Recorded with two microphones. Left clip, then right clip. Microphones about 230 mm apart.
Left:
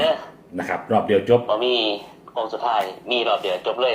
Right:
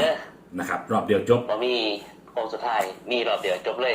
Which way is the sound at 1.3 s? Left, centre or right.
Centre.